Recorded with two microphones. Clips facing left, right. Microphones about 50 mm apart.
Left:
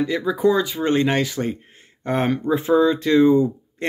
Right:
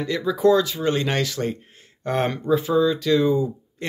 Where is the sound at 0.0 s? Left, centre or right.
Centre.